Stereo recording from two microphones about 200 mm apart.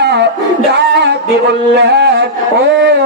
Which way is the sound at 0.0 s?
55° right (ahead or behind).